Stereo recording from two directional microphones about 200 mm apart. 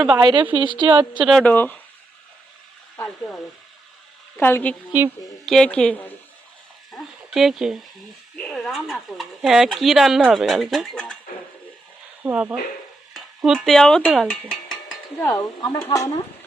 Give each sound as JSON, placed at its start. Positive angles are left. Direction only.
{"t": 0.2, "sound": "speech", "side_deg": -20}
{"t": 1.2, "sound": "speech", "side_deg": 0}
{"t": 2.9, "sound": "speech", "side_deg": 10}
{"t": 4.4, "sound": "speech", "side_deg": 10}
{"t": 4.9, "sound": "speech", "side_deg": -10}
{"t": 5.5, "sound": "speech", "side_deg": 5}
{"t": 12.2, "sound": "speech", "side_deg": -5}
{"t": 13.1, "sound": "stir", "side_deg": 0}
{"t": 15.2, "sound": "speech", "side_deg": 20}